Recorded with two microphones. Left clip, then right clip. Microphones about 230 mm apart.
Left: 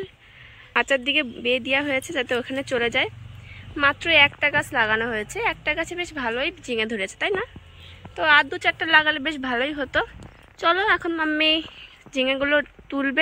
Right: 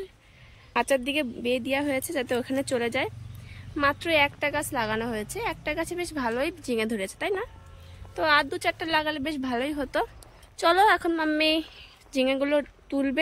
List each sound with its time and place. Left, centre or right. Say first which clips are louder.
0.7 s a woman's voice: left 4 dB; centre